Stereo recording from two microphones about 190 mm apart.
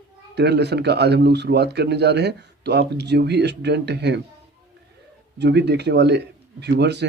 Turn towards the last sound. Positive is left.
turn(degrees=-60)  # may be behind; listen again after turning